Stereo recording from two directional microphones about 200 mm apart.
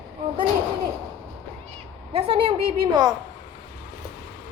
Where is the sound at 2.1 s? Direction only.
25° right (ahead or behind).